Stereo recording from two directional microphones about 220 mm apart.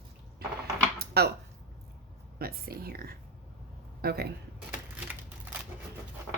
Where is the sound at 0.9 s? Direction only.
45° right (ahead or behind).